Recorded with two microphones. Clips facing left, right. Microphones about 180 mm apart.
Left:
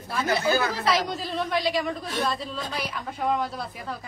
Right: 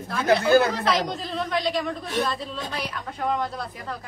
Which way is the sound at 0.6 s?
Centre (ahead or behind).